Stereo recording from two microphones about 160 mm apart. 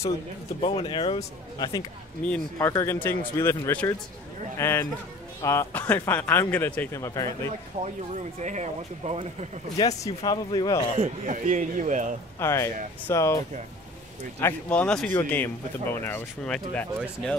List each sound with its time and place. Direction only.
0.6 s speech: 35° left (ahead or behind)
2.2 s speech: 10° left (ahead or behind)
7.8 s speech: 45° right (ahead or behind)
9.8 s speech: 25° left (ahead or behind)
11.0 s speech: 50° right (ahead or behind)
12.4 s speech: 15° left (ahead or behind)
14.4 s speech: 5° left (ahead or behind)